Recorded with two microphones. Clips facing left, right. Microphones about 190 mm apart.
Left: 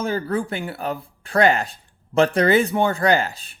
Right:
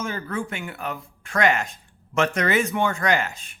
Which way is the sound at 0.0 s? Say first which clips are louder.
Left 6 dB; 35° left (ahead or behind).